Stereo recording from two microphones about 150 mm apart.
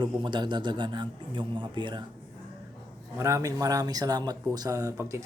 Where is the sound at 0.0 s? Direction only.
30° right (ahead or behind).